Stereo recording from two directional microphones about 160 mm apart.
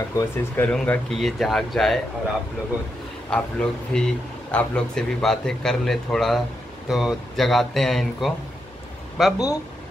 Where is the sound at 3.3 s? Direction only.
5° left (ahead or behind).